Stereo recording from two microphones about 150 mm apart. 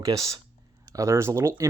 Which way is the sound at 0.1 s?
20° right (ahead or behind).